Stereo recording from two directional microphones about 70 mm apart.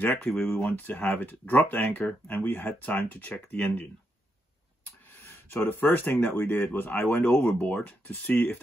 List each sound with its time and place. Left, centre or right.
0.0 s speech: left
5.5 s speech: left